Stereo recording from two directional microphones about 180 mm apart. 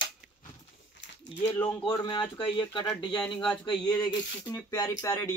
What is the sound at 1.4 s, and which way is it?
Speech, 10° left (ahead or behind).